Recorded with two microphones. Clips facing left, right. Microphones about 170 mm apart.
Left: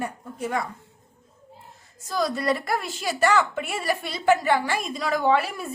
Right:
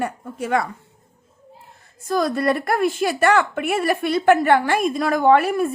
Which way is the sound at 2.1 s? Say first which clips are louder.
Right 5 dB; 55° right (ahead or behind).